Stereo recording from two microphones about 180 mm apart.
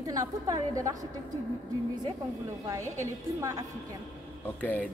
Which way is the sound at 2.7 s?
15° right (ahead or behind).